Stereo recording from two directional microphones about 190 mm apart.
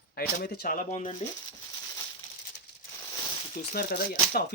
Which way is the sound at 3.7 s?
55° left (ahead or behind).